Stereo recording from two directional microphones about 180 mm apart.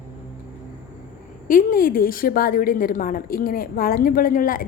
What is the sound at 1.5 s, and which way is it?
A woman's voice, 50° left (ahead or behind).